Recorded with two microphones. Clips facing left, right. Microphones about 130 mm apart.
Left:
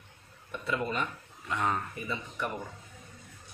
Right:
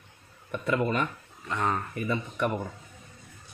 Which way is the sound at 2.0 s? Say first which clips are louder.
Right 7 dB; 60° right (ahead or behind).